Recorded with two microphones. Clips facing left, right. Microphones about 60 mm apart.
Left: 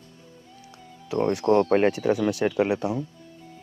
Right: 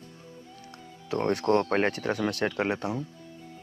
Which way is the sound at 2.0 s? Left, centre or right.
Right.